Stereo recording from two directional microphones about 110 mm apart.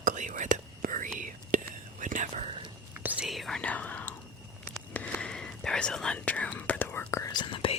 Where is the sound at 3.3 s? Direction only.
Centre (ahead or behind); by 7.3 s 25° left (ahead or behind).